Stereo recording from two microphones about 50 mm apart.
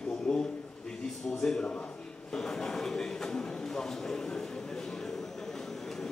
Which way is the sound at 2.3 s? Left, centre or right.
Centre.